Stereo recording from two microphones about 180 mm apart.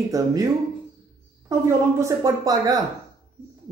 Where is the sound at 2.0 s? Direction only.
15° right (ahead or behind).